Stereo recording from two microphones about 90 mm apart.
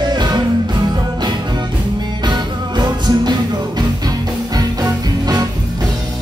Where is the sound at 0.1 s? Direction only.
50° right (ahead or behind).